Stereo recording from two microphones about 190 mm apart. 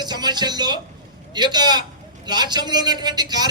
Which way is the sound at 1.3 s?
20° right (ahead or behind).